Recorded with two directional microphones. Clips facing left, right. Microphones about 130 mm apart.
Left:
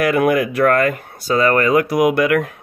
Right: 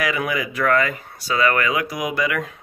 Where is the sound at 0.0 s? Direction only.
55° left (ahead or behind).